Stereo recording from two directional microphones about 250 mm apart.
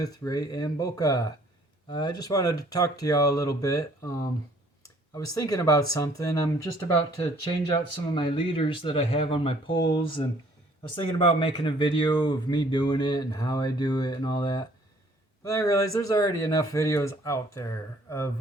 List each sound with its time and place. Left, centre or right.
0.0 s speech: centre